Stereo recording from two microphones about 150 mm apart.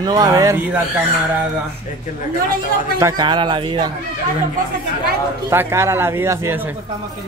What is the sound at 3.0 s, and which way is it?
Speech, 25° right (ahead or behind).